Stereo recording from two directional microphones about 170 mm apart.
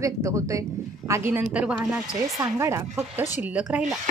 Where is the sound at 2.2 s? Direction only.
20° right (ahead or behind).